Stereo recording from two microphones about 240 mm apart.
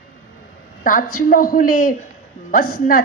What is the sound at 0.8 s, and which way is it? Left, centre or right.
A woman's voice, left.